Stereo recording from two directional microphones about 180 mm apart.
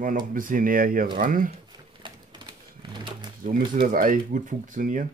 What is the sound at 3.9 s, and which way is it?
Speech, 50° right (ahead or behind).